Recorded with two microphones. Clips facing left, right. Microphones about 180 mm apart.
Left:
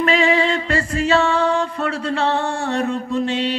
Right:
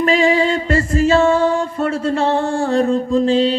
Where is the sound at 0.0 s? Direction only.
40° right (ahead or behind).